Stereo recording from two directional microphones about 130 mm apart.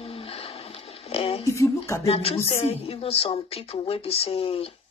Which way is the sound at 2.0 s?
50° left (ahead or behind).